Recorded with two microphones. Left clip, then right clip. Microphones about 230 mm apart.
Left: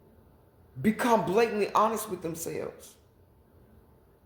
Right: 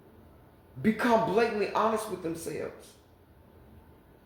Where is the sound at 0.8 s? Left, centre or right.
Left.